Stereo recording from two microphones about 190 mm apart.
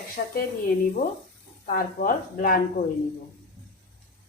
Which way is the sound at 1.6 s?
50° left (ahead or behind).